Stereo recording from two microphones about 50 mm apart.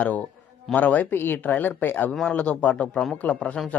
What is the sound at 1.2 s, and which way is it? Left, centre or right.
Speech, left.